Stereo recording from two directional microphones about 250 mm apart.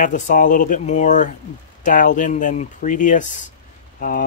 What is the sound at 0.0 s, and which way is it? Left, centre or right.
Speech, left.